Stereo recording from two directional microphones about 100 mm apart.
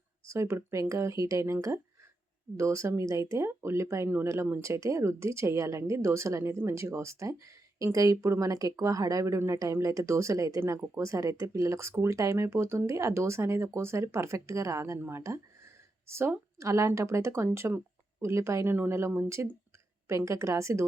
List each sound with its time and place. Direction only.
0.3 s speech: 25° right (ahead or behind)